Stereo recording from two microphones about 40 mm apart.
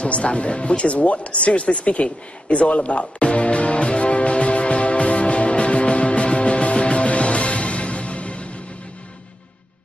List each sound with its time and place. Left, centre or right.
0.0 s music: left